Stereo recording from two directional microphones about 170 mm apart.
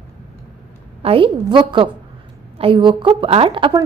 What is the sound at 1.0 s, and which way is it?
A woman's voice, 30° right (ahead or behind).